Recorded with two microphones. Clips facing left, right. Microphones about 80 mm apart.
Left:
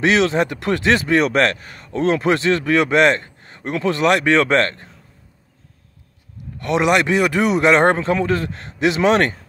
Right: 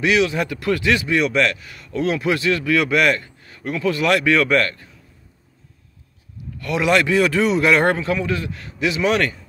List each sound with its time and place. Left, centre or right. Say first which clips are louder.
0.0 s a man's voice: left 2 dB; left
6.6 s a man's voice: left 2 dB; left